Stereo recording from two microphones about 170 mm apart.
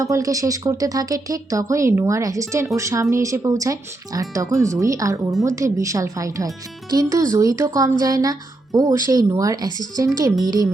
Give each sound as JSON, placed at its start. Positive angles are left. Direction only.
{"t": 0.0, "sound": "speech", "side_deg": -20}